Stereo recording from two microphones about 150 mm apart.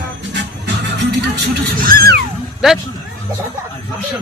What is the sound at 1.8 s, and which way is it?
Speech, 85° right.